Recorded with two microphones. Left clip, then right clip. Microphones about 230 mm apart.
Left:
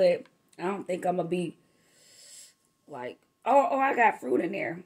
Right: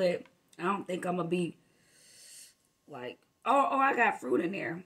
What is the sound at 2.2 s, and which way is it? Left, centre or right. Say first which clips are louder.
Snort: left 2 dB; right.